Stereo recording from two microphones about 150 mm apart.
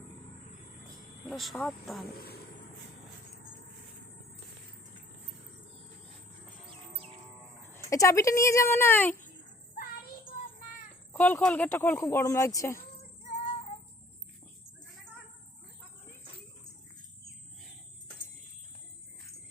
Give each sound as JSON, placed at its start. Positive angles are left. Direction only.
{"t": 1.2, "sound": "speech", "side_deg": 0}
{"t": 2.1, "sound": "speech", "side_deg": 90}
{"t": 7.7, "sound": "speech", "side_deg": 20}
{"t": 11.1, "sound": "speech", "side_deg": 10}